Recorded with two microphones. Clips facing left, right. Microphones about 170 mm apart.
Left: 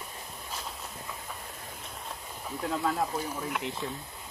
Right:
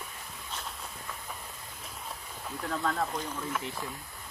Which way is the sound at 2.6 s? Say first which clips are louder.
Left 2 dB; 15° left (ahead or behind).